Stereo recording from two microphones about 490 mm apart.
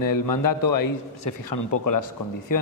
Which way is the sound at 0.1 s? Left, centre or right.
Left.